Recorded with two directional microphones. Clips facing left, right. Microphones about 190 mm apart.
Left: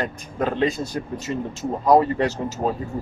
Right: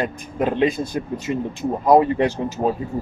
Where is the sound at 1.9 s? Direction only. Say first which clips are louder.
Right 2 dB; 15° right (ahead or behind).